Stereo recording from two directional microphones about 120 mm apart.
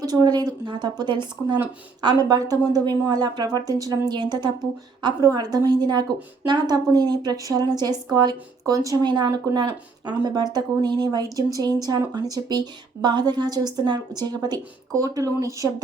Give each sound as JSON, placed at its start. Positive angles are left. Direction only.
{"t": 0.0, "sound": "a woman's voice", "side_deg": -30}